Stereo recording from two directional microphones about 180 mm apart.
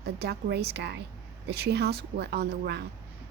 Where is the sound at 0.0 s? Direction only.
65° right (ahead or behind).